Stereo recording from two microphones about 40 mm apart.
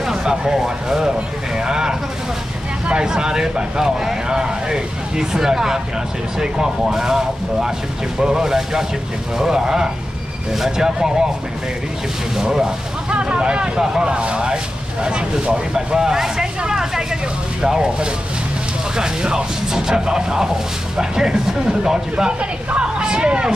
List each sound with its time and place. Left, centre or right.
0.0 s speech: centre
12.4 s speech: centre
15.7 s speech: centre
18.9 s speech: centre
22.4 s speech: right